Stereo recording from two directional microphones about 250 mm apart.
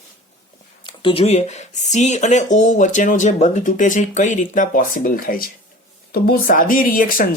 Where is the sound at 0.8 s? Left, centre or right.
Centre.